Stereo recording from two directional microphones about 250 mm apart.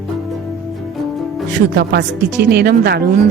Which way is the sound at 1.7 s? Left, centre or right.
Right.